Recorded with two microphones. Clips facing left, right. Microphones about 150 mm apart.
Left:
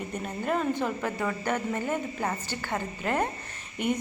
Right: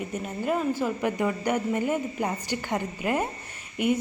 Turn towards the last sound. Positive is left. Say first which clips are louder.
# right 4 dB
turn(degrees=-10)  # may be behind; listen again after turning